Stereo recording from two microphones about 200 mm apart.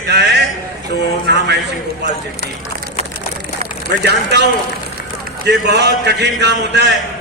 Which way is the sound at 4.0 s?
55° right (ahead or behind).